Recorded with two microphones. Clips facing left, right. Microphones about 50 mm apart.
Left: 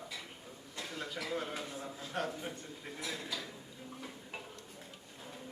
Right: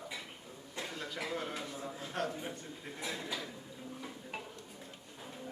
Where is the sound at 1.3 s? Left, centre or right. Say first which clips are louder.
Left 1 dB; centre.